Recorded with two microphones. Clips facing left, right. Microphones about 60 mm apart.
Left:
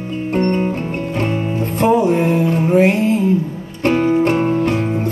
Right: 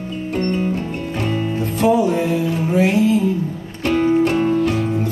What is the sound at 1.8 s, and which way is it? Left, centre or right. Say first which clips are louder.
Music: left 2 dB; left.